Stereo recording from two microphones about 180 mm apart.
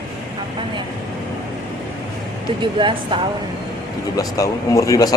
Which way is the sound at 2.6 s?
25° right (ahead or behind).